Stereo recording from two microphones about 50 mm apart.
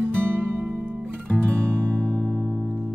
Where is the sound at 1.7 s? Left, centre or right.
Right.